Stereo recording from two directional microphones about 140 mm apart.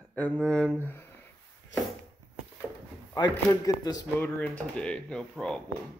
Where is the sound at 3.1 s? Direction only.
25° left (ahead or behind).